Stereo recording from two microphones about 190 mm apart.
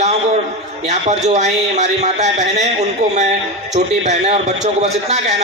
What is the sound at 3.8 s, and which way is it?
A man's voice, 35° right (ahead or behind).